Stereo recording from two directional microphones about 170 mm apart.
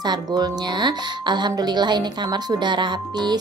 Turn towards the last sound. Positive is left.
turn(degrees=-25)  # may be behind; listen again after turning